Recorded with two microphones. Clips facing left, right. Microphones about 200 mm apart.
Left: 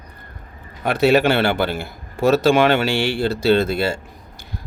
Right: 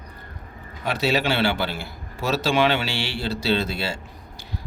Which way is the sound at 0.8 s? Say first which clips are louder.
Left 8 dB; 55° left (ahead or behind).